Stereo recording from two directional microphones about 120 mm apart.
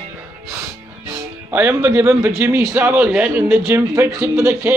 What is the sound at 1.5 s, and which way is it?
A man's voice, 15° right (ahead or behind).